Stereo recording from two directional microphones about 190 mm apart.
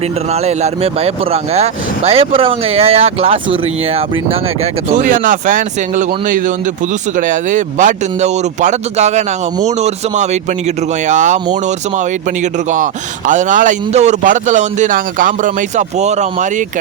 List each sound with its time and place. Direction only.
0.4 s a man's voice: 35° right (ahead or behind)
4.9 s a man's voice: 45° right (ahead or behind)
12.7 s a man's voice: 40° right (ahead or behind)